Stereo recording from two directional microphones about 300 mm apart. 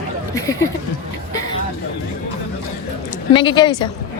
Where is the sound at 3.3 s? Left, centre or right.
Centre.